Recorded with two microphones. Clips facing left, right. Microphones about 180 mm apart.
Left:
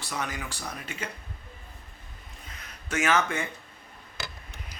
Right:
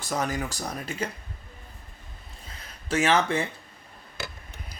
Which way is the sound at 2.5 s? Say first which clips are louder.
Right 6 dB; 30° right (ahead or behind).